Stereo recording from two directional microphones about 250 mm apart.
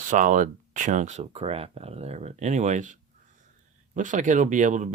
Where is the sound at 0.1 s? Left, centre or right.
Right.